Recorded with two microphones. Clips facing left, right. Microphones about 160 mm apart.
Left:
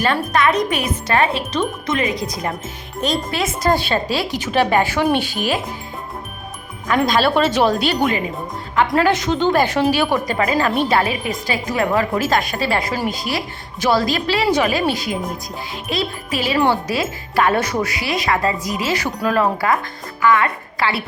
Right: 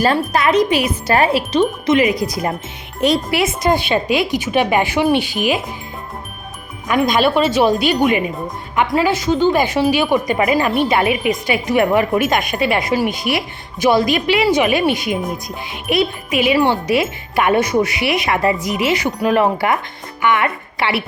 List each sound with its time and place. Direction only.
0.0 s speech: 35° right (ahead or behind)
1.9 s speech: 30° left (ahead or behind)
2.1 s speech: 5° right (ahead or behind)
3.4 s speech: 15° right (ahead or behind)
6.8 s speech: 15° right (ahead or behind)
8.9 s speech: 5° right (ahead or behind); by 20.9 s 25° right (ahead or behind)